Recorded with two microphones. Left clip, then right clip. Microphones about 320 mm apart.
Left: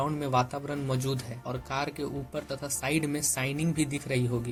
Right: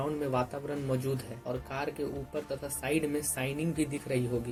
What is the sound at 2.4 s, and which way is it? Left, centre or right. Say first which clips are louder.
A man's voice: left 3 dB; left.